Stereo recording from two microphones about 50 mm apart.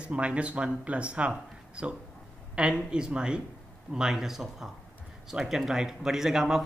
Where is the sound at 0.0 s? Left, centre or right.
Right.